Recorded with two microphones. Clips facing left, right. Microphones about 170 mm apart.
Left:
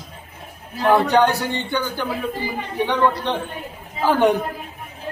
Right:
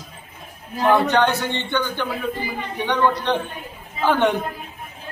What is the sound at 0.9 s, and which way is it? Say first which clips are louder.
Speech: left 2 dB; 10° left (ahead or behind).